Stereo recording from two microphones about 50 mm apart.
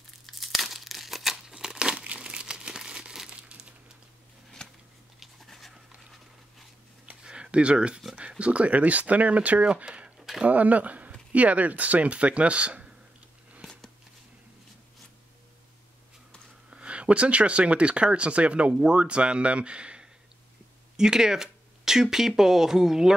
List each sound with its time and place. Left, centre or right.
0.3 s crumpling: centre; by 3.7 s right
4.6 s a sound: centre
5.2 s writing: centre
7.2 s a sound: centre
8.2 s speech: right
16.7 s speech: right